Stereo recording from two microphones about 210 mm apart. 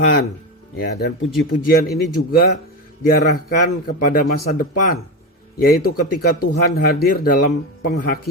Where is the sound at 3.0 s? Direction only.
45° left (ahead or behind).